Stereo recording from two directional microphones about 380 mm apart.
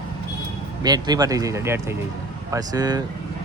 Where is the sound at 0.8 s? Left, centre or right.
Centre.